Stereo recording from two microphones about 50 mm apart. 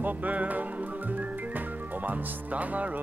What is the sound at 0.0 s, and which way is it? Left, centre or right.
Music, right.